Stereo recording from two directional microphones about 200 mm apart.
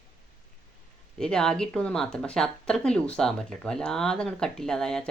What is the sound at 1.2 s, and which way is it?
Speech, 5° left (ahead or behind).